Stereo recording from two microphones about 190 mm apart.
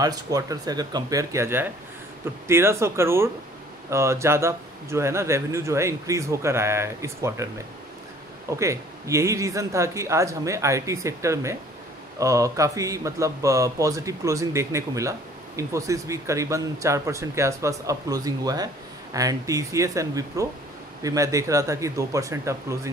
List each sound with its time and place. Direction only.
0.0 s speech: 20° right (ahead or behind)
8.5 s speech: 15° right (ahead or behind)